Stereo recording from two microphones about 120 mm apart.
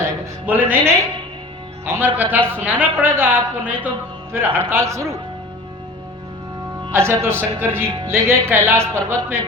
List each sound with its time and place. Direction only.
0.0 s a woman's voice: 15° right (ahead or behind)
2.1 s a woman's voice: 15° right (ahead or behind)
6.9 s speech: 20° right (ahead or behind)